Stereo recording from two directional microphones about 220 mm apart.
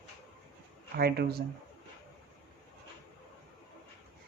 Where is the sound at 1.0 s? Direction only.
45° right (ahead or behind).